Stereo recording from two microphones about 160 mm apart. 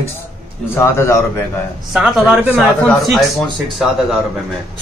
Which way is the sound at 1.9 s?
5° right (ahead or behind).